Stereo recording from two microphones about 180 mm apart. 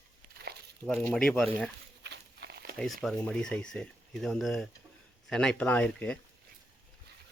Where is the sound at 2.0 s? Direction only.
70° right (ahead or behind).